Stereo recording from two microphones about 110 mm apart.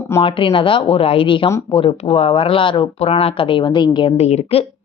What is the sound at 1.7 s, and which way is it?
A woman's voice, 60° left (ahead or behind).